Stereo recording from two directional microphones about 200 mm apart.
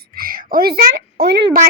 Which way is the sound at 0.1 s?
45° right (ahead or behind).